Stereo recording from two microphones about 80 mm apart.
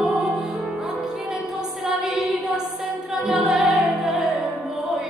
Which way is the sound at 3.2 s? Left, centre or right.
Centre.